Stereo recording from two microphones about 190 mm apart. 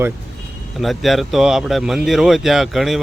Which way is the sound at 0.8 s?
Centre (ahead or behind).